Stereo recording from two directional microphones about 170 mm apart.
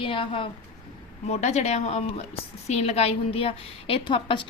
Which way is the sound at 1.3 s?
40° left (ahead or behind).